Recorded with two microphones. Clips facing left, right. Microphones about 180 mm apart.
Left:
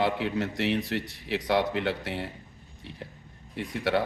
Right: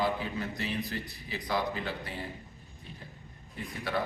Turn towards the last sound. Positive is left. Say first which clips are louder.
# left 6 dB
turn(degrees=80)